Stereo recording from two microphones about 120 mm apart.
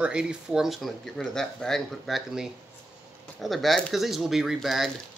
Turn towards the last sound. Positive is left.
turn(degrees=0)  # may be behind; listen again after turning